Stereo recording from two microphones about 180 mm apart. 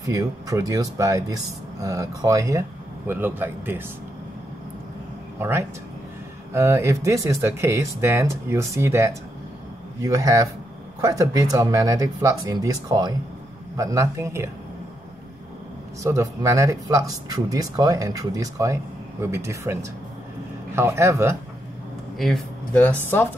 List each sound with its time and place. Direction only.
0.0 s speech: 20° right (ahead or behind)
5.4 s speech: 15° right (ahead or behind)
16.0 s speech: 15° right (ahead or behind)
22.2 s speech: 5° left (ahead or behind)